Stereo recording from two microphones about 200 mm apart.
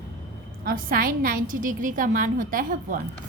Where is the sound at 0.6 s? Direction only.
45° right (ahead or behind).